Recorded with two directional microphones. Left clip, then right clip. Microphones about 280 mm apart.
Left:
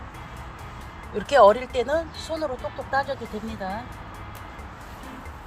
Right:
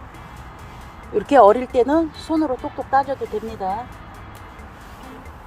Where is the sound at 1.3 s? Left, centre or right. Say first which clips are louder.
Right 3 dB; right.